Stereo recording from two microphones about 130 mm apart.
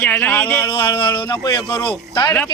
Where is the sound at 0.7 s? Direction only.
40° left (ahead or behind).